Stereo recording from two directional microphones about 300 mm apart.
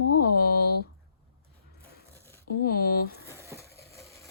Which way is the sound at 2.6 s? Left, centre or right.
Left.